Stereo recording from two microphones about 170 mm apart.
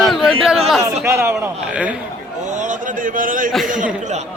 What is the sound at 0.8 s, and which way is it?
A man's voice, 15° right (ahead or behind).